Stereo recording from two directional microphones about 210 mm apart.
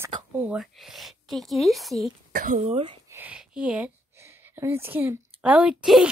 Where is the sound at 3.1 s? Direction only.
5° right (ahead or behind).